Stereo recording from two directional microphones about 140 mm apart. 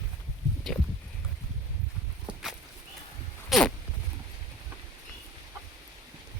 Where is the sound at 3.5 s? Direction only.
Centre (ahead or behind).